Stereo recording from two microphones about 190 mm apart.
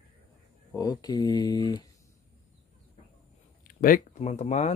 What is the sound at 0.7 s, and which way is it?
Speech, 20° left (ahead or behind).